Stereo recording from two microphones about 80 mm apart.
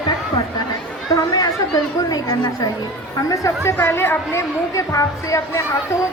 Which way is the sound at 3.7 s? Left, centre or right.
Left.